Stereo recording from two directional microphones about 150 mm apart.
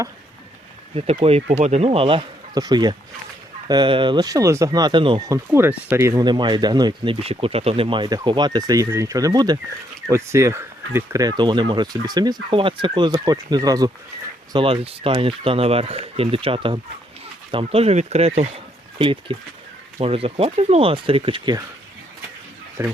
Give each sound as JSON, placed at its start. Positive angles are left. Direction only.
{"t": 0.9, "sound": "speech", "side_deg": -40}
{"t": 5.3, "sound": "speech", "side_deg": -15}
{"t": 6.2, "sound": "speech", "side_deg": -30}
{"t": 14.5, "sound": "speech", "side_deg": -35}
{"t": 22.8, "sound": "speech", "side_deg": -20}